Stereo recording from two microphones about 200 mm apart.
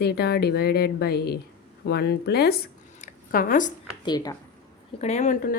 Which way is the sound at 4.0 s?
20° left (ahead or behind).